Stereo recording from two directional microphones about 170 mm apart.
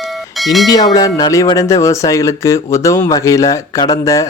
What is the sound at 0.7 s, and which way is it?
Speech, 20° left (ahead or behind).